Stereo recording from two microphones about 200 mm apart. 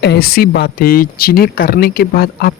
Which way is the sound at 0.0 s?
50° left (ahead or behind).